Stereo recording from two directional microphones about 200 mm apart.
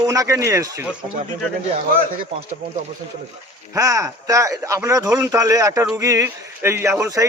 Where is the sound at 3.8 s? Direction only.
15° right (ahead or behind).